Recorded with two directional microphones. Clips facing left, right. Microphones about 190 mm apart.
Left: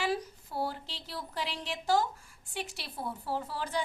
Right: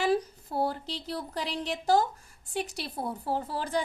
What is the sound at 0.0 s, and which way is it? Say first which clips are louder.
A woman's voice: right 6 dB; 45° right (ahead or behind).